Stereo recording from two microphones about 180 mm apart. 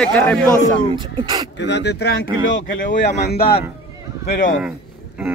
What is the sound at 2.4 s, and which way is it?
Speech, 85° left.